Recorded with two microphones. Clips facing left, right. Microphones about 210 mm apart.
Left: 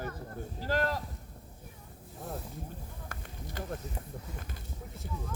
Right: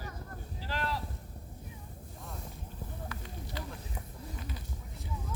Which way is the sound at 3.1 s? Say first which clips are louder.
Right 2 dB; 50° left (ahead or behind).